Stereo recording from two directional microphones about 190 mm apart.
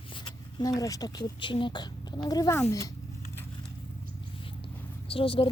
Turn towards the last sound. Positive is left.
turn(degrees=25)  # may be behind; listen again after turning